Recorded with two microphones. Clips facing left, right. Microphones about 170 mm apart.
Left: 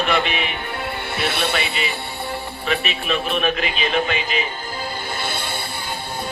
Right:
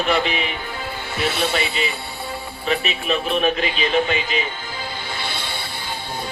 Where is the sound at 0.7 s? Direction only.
65° left (ahead or behind).